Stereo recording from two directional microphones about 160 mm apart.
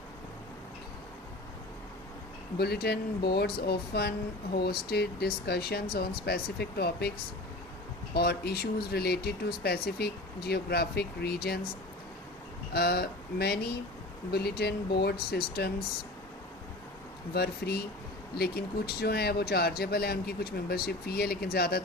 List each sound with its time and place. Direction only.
2.6 s speech: 85° left
8.1 s speech: 80° left
12.7 s speech: 80° left
17.3 s speech: 80° left